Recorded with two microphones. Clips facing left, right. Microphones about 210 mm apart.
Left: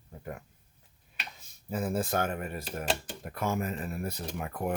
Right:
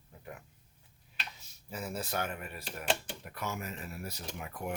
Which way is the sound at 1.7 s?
50° left (ahead or behind).